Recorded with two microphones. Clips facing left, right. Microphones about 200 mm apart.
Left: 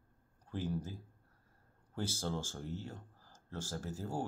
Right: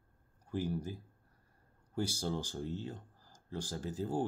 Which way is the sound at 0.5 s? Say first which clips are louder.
Right 2 dB; 10° right (ahead or behind).